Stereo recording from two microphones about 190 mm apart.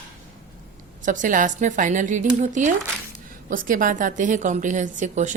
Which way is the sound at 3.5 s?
45° right (ahead or behind).